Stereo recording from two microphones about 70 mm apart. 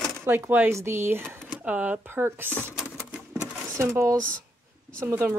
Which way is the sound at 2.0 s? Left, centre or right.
Right.